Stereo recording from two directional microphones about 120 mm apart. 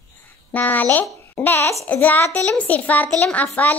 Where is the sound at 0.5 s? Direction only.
15° left (ahead or behind).